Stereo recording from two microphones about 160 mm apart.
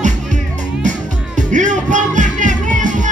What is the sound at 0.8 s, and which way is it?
Music, 50° right (ahead or behind).